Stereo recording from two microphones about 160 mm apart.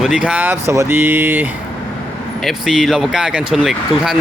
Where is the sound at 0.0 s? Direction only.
5° right (ahead or behind).